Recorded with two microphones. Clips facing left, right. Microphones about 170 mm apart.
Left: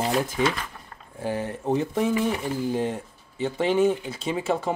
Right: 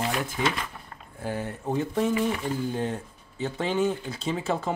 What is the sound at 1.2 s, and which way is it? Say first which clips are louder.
Speech: left 3 dB; 25° left (ahead or behind).